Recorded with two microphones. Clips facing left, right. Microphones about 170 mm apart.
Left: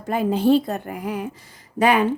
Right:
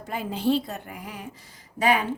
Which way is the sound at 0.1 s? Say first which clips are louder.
Left 7 dB; 50° left (ahead or behind).